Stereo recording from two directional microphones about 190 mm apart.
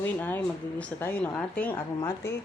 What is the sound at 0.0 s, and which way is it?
Speech, 10° left (ahead or behind).